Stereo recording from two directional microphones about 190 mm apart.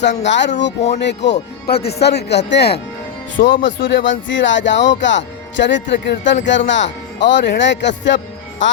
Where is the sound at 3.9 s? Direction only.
75° left (ahead or behind).